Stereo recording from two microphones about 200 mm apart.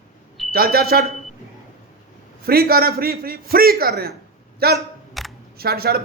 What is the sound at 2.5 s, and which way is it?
A man's voice, 50° right (ahead or behind).